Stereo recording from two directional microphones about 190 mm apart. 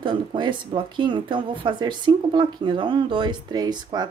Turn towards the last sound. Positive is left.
turn(degrees=-20)  # may be behind; listen again after turning